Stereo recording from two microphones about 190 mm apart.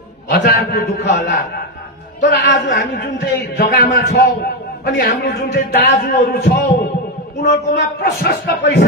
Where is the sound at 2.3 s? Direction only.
65° left (ahead or behind).